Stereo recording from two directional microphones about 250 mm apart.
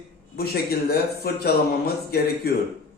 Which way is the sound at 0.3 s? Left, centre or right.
Left.